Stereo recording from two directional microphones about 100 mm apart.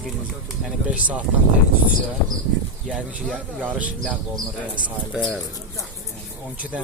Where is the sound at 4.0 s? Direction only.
5° left (ahead or behind).